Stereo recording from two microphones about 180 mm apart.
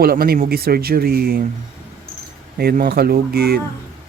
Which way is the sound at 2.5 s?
55° right (ahead or behind).